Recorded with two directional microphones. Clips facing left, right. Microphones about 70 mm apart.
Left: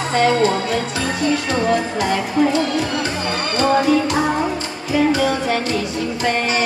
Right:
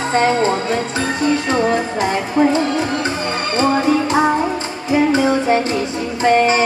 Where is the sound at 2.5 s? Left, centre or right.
Right.